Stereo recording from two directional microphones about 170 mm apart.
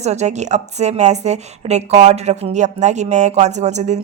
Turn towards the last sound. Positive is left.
turn(degrees=-45)  # may be behind; listen again after turning